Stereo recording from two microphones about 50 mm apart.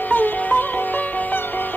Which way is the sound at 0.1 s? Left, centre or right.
Left.